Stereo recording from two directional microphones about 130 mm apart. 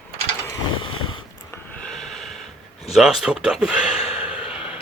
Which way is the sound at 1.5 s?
15° left (ahead or behind).